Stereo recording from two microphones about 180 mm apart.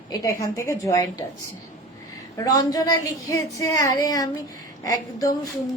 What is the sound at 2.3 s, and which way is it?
A woman's voice, 20° left (ahead or behind).